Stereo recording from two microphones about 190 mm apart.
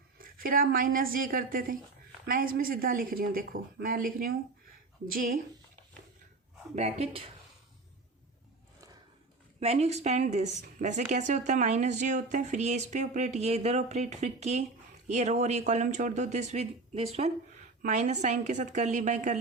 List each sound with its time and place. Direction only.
0.2 s a woman's voice: 50° right (ahead or behind)
6.7 s speech: 35° right (ahead or behind)
9.6 s speech: 35° right (ahead or behind)